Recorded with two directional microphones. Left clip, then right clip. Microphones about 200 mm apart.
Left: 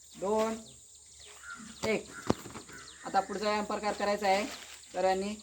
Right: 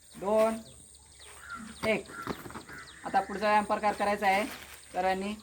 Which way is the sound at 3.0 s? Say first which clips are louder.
Right 2 dB; 40° right (ahead or behind).